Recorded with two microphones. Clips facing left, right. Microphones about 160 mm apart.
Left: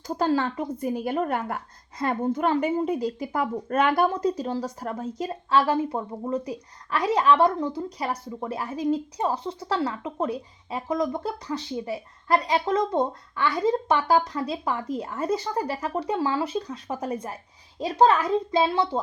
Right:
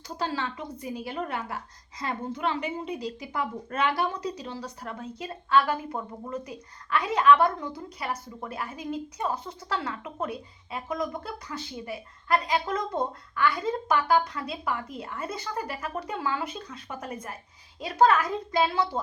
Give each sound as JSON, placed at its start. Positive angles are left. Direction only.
{"t": 0.1, "sound": "a woman's voice", "side_deg": 50}